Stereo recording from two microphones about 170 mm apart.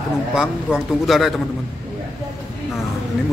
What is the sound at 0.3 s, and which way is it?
A man's voice, 5° right (ahead or behind).